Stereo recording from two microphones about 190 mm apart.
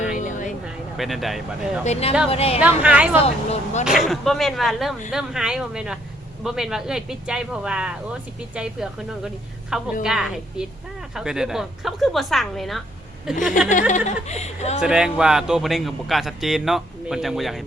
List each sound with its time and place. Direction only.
0.2 s a sound: 40° left (ahead or behind)
0.9 s a man's voice: centre (ahead or behind)
1.8 s speech: 35° left (ahead or behind)
2.8 s speech: 5° right (ahead or behind)
3.2 s speech: 35° left (ahead or behind)
3.8 s a man's voice: centre (ahead or behind)
13.7 s speech: 40° left (ahead or behind)
14.8 s a man's voice: 5° right (ahead or behind)